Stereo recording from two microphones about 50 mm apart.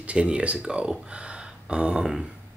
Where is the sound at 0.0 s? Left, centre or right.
Right.